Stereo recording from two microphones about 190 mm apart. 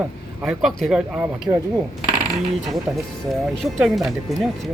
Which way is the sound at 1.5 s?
10° right (ahead or behind).